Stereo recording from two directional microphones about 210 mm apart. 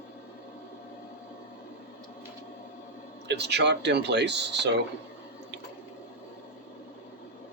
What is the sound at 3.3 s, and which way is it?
Speech, 55° right (ahead or behind).